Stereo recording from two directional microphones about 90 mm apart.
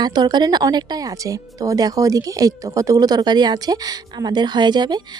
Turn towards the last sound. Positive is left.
turn(degrees=-50)  # may be behind; listen again after turning